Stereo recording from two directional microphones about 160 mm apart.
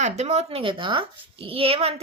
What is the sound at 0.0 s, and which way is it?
A child's voice, 45° right (ahead or behind).